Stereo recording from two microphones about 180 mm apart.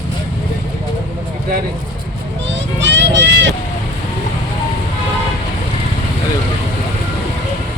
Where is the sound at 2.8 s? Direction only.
80° right.